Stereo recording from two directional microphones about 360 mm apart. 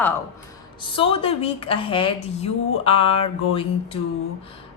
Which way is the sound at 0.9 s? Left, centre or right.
Centre.